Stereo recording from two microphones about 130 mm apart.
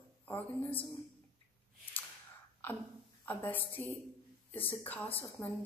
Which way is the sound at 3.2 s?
15° left (ahead or behind).